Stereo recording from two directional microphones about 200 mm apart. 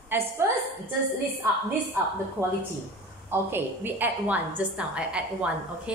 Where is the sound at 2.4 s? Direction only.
15° right (ahead or behind).